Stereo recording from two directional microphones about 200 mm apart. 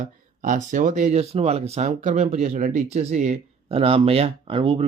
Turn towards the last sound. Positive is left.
turn(degrees=-30)  # may be behind; listen again after turning